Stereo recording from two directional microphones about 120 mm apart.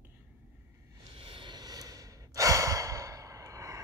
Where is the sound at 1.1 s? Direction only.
50° right (ahead or behind).